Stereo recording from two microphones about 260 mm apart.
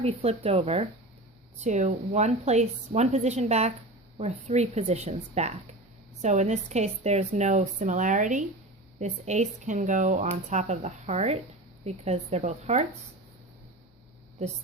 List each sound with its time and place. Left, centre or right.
0.0 s speech: right